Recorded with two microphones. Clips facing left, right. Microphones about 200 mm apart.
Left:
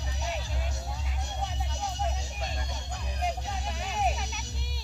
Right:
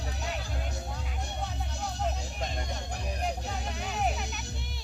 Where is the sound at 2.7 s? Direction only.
55° right (ahead or behind).